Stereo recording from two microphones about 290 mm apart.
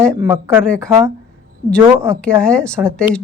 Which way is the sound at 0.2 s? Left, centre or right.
Centre.